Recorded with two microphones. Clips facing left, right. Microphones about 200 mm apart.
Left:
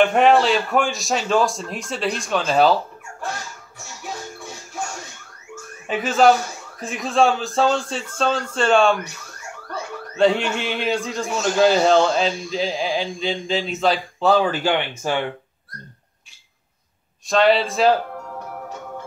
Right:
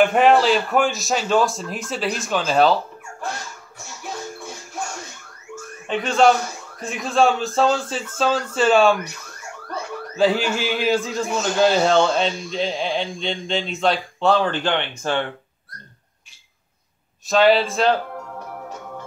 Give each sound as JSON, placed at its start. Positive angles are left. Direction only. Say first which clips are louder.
{"t": 0.0, "sound": "a man's voice", "louder": "even", "side_deg": 0}
{"t": 5.9, "sound": "a man's voice", "louder": "left 1 dB", "side_deg": 5}
{"t": 10.1, "sound": "a man's voice", "louder": "left 1 dB", "side_deg": -5}
{"t": 17.3, "sound": "a man's voice", "louder": "right 1 dB", "side_deg": 0}